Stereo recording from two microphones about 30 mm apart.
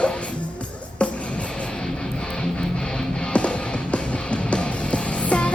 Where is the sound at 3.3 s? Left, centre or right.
Left.